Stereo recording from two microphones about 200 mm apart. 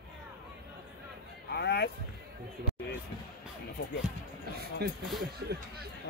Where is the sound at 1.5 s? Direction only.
55° left (ahead or behind).